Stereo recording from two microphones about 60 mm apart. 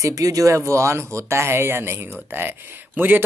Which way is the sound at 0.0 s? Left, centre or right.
Right.